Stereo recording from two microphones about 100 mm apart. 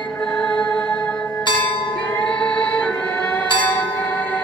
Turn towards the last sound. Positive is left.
turn(degrees=15)  # may be behind; listen again after turning